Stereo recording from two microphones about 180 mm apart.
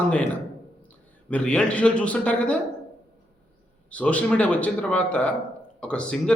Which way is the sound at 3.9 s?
5° left (ahead or behind).